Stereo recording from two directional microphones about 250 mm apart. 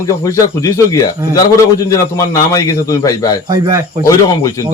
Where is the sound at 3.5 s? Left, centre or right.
Centre.